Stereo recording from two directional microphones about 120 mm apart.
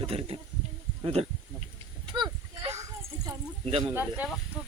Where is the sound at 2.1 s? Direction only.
40° right (ahead or behind).